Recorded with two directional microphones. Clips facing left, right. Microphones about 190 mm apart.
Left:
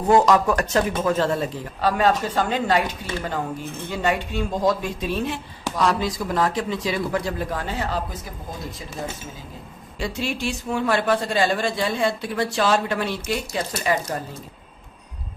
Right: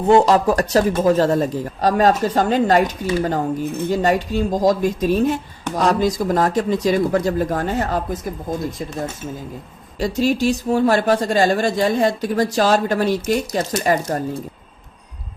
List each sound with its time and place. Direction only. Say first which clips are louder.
0.1 s a man's voice: right 3 dB; 30° right (ahead or behind); by 8.5 s 50° right (ahead or behind)
10.0 s a man's voice: right 8 dB; 40° right (ahead or behind)